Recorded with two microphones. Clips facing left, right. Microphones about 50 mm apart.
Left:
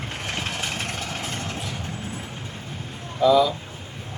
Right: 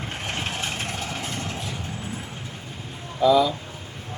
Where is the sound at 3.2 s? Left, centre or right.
Centre.